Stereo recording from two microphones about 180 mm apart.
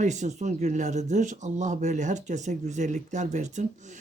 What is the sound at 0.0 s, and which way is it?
Speech, 40° right (ahead or behind).